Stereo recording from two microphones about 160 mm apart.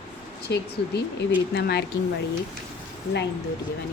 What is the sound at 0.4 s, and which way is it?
A woman's voice, 90° left.